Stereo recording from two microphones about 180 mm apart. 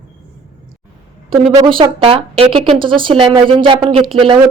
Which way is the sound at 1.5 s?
25° right (ahead or behind).